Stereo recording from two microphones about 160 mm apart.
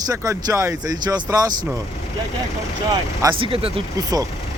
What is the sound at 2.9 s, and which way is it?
Speech, 30° right (ahead or behind).